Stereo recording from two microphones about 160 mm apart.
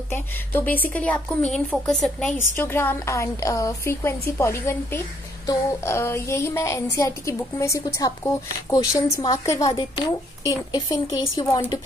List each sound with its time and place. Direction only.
0.1 s a woman's voice: 15° left (ahead or behind)